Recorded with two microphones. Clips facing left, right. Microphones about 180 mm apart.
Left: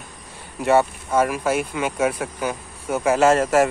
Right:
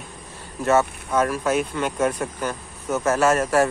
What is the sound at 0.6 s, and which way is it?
Speech, 15° left (ahead or behind).